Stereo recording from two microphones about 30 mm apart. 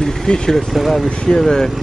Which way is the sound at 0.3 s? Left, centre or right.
Left.